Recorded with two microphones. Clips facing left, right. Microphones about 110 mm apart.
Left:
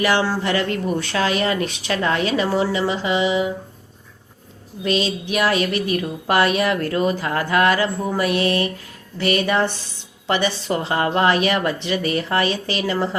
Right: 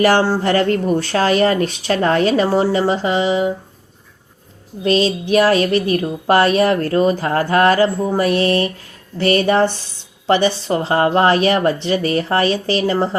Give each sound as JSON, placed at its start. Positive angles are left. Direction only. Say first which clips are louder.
{"t": 0.0, "sound": "speech", "louder": "right 5 dB", "side_deg": -40}
{"t": 4.8, "sound": "speech", "louder": "right 5 dB", "side_deg": -40}